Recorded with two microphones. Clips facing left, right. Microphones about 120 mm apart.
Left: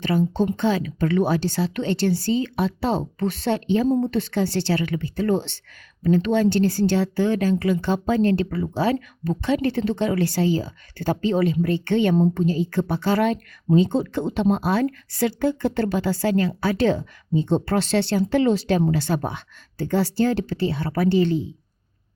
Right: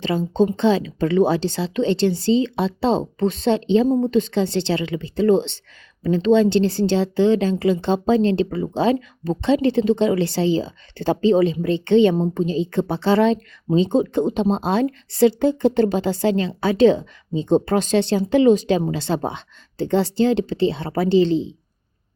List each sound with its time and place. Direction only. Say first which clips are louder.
0.3 s a woman's voice: right 4 dB; 20° right (ahead or behind)